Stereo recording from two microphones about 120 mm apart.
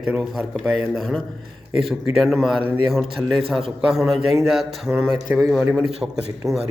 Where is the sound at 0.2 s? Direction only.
Centre (ahead or behind).